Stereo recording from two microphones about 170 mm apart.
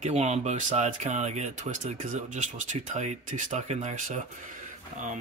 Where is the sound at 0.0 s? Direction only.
40° right (ahead or behind).